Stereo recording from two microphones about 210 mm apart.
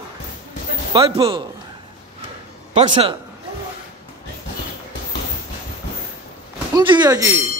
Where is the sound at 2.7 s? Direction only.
25° right (ahead or behind).